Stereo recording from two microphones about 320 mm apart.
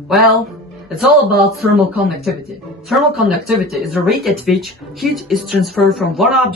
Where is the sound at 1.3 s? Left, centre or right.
Right.